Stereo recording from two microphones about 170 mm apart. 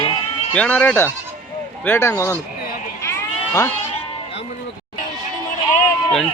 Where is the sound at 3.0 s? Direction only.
20° left (ahead or behind).